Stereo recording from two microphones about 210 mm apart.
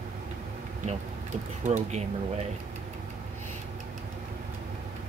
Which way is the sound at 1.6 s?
35° right (ahead or behind).